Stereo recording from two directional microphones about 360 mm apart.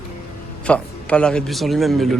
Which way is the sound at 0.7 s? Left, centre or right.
Centre.